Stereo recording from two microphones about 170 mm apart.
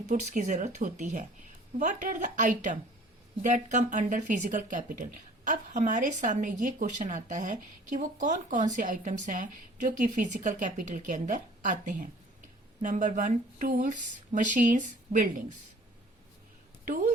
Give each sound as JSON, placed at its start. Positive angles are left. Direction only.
{"t": 0.0, "sound": "speech", "side_deg": -45}
{"t": 16.8, "sound": "speech", "side_deg": -50}